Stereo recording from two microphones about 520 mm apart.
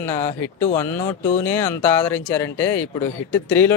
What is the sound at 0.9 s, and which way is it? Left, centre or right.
Speech, centre.